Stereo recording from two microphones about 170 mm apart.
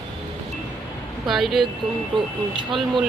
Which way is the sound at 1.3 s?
Centre (ahead or behind).